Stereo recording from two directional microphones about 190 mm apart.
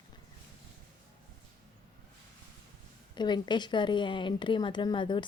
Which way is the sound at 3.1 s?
25° left (ahead or behind).